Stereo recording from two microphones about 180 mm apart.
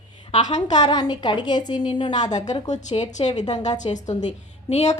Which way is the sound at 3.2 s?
40° left (ahead or behind).